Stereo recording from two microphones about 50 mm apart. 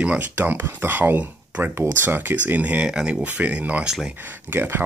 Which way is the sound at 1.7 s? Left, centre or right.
Right.